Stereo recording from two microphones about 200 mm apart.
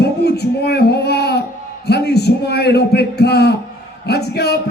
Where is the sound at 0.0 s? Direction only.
55° left (ahead or behind).